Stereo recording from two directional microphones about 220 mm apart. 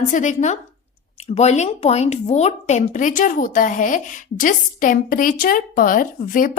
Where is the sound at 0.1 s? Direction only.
35° left (ahead or behind).